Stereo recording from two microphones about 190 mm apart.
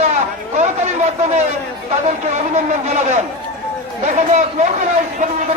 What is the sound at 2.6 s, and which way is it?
Speech, 35° right (ahead or behind).